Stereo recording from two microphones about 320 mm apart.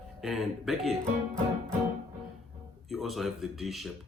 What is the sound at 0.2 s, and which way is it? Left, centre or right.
Speech, centre.